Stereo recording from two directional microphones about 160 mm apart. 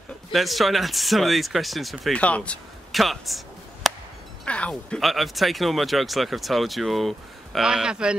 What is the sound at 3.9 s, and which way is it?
Chop, centre (ahead or behind).